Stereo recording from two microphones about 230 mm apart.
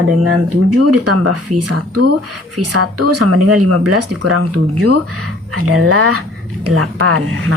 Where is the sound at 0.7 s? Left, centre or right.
Right.